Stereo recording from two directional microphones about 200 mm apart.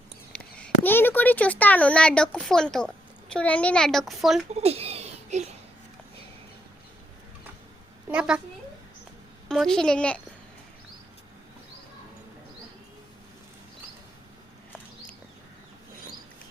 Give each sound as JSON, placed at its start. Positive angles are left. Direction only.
{"t": 0.3, "sound": "speech", "side_deg": 5}
{"t": 4.5, "sound": "a sound", "side_deg": -30}
{"t": 8.0, "sound": "a woman's voice", "side_deg": -5}
{"t": 9.5, "sound": "a woman's voice", "side_deg": 5}